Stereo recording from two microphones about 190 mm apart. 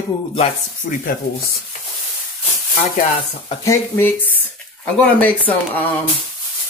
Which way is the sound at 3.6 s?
15° left (ahead or behind).